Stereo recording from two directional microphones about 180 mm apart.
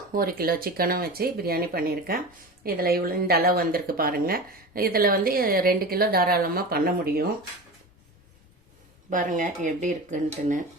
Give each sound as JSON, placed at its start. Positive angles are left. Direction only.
{"t": 0.1, "sound": "speech", "side_deg": -55}
{"t": 9.0, "sound": "speech", "side_deg": -45}